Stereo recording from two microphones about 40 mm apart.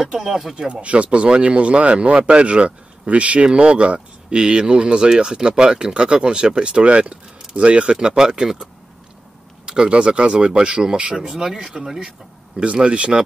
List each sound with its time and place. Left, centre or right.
0.0 s speech: centre
0.7 s speech: right; by 8.6 s centre
9.7 s speech: right; by 12.0 s centre
12.5 s speech: right